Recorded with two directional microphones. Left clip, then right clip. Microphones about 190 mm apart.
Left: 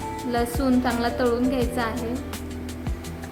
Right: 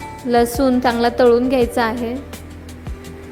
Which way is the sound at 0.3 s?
35° right (ahead or behind).